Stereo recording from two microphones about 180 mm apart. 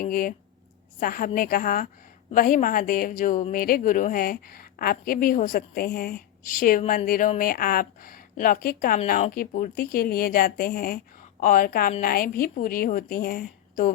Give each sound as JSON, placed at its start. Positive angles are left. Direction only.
{"t": 0.0, "sound": "a woman's voice", "side_deg": 55}